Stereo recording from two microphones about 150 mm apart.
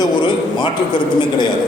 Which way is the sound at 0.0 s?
30° left (ahead or behind).